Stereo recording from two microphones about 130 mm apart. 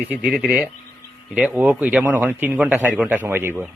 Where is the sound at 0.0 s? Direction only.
15° right (ahead or behind).